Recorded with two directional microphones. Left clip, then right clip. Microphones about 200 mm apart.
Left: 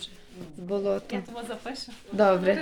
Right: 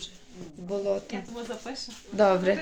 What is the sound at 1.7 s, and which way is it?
Speech, 50° left (ahead or behind).